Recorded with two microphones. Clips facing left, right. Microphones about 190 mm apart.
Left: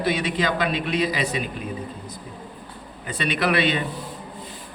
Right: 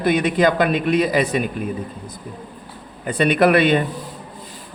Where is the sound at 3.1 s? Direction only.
55° right (ahead or behind).